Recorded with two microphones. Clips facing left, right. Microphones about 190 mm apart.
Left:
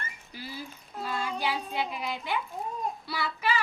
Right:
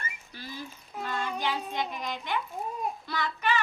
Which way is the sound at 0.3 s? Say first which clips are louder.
Left 2 dB; 10° left (ahead or behind).